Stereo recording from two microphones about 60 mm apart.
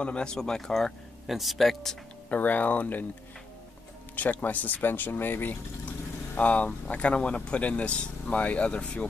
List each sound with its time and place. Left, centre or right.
0.0 s speech: centre
2.2 s speech: left
4.1 s speech: left
5.9 s speech: left